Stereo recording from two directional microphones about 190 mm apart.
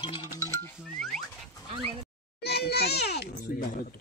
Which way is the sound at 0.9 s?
5° left (ahead or behind).